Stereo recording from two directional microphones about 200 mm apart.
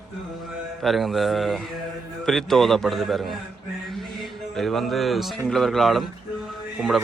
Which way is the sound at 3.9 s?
Centre (ahead or behind).